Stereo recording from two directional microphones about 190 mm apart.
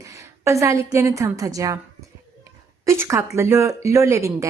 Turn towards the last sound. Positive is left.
turn(degrees=-15)  # may be behind; listen again after turning